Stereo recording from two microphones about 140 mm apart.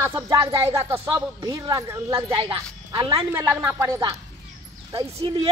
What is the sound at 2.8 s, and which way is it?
Speech, 30° right (ahead or behind).